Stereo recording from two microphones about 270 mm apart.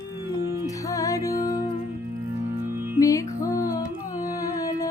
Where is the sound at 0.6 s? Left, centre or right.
Centre.